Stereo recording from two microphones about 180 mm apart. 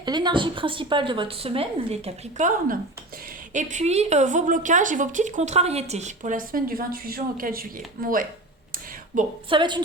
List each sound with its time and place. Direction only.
0.0 s a woman's voice: 25° right (ahead or behind)
3.5 s a woman's voice: 45° right (ahead or behind)
9.5 s a woman's voice: 25° right (ahead or behind)